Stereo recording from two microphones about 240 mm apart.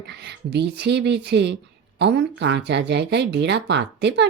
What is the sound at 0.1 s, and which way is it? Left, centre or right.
Speech, right.